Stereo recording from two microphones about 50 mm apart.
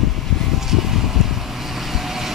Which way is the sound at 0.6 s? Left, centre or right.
Centre.